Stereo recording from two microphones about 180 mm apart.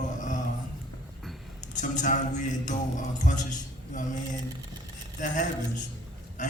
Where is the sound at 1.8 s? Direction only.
45° left (ahead or behind).